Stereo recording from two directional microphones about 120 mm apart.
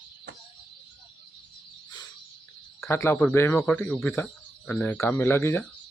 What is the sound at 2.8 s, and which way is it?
Speech, 20° left (ahead or behind).